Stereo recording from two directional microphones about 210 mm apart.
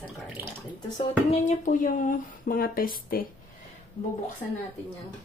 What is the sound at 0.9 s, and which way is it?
Speech, 30° left (ahead or behind).